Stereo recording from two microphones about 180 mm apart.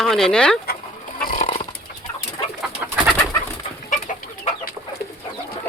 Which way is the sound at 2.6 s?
5° right (ahead or behind).